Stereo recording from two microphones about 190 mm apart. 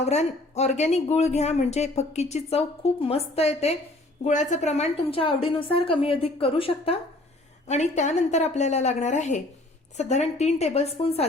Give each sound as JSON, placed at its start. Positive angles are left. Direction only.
{"t": 0.0, "sound": "a woman's voice", "side_deg": 35}